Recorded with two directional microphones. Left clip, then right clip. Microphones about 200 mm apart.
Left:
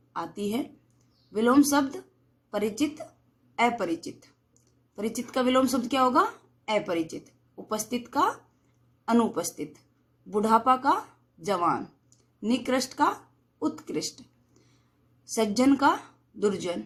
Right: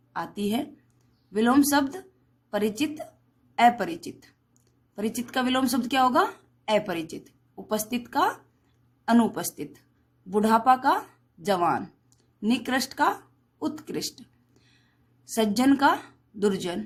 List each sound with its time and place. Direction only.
0.1 s a woman's voice: 50° right (ahead or behind)